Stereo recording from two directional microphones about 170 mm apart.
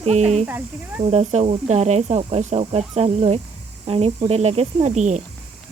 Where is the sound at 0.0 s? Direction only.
40° right (ahead or behind).